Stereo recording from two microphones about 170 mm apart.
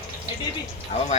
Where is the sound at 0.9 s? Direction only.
40° left (ahead or behind).